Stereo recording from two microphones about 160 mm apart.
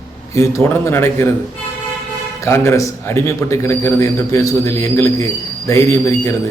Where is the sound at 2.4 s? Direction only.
15° left (ahead or behind).